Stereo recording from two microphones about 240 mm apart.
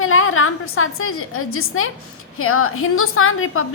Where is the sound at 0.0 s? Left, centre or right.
Left.